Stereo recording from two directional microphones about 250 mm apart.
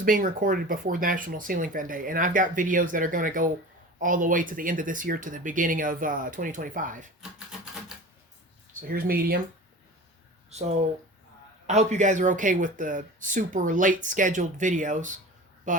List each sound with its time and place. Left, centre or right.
0.0 s speech: right
7.2 s typewriter: centre
8.8 s speech: right
10.5 s speech: right